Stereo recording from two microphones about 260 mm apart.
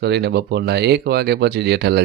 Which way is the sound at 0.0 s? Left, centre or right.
Right.